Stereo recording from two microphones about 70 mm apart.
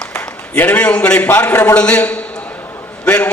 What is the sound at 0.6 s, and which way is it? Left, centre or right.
A man's voice, left.